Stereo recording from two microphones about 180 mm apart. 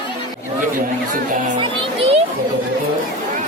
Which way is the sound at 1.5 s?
25° right (ahead or behind).